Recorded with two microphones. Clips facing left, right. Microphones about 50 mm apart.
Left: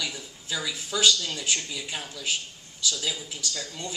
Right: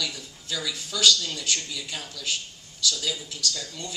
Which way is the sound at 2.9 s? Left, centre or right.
Centre.